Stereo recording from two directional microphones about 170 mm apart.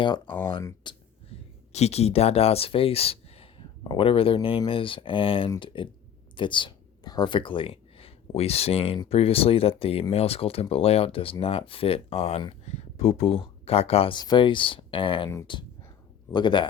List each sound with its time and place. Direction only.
0.0 s speech: 25° left (ahead or behind)
0.4 s a sound: 25° left (ahead or behind)
1.7 s speech: 40° left (ahead or behind)